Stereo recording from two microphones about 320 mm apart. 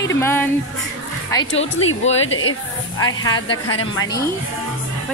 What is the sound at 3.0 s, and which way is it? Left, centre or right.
Speech, centre.